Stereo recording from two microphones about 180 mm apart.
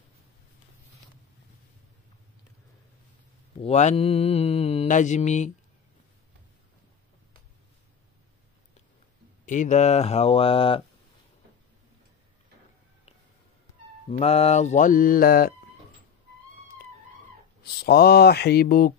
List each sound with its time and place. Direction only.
3.6 s mantra: 35° left (ahead or behind)
9.5 s mantra: 45° left (ahead or behind)
14.0 s speech: 35° left (ahead or behind); by 15.5 s 55° left (ahead or behind)
17.8 s speech: 65° left (ahead or behind)